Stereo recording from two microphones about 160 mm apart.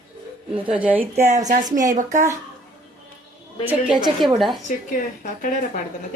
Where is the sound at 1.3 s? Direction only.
45° right (ahead or behind).